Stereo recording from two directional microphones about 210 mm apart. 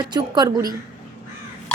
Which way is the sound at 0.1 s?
20° right (ahead or behind).